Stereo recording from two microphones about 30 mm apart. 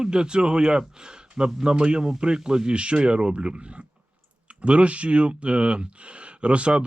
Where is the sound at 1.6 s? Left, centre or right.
Right.